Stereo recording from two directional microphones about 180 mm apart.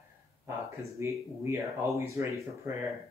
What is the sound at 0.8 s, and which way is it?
Speech, 15° right (ahead or behind).